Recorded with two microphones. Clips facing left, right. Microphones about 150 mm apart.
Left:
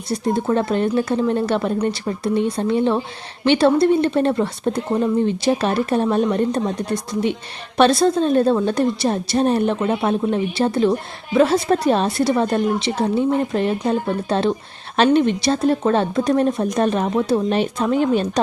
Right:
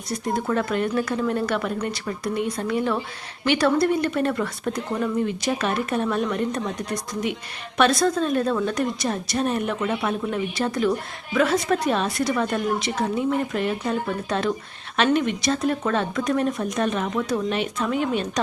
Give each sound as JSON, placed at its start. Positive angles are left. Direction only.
{"t": 0.1, "sound": "a woman's voice", "side_deg": 25}